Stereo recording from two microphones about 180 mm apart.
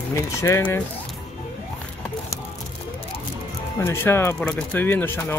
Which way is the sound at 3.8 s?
15° left (ahead or behind).